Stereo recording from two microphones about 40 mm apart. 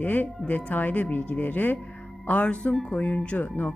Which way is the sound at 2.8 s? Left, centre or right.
Left.